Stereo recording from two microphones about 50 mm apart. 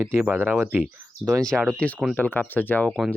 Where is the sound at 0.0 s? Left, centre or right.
Right.